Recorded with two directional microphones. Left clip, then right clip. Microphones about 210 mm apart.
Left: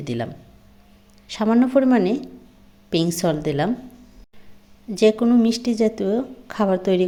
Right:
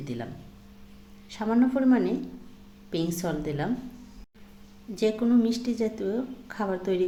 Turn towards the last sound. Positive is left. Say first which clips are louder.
# left 9 dB
turn(degrees=40)  # may be behind; listen again after turning